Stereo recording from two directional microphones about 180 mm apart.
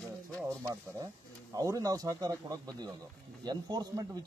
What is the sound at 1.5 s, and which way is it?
A man's voice, 20° right (ahead or behind).